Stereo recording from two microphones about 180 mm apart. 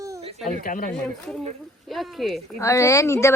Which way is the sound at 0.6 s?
50° left (ahead or behind).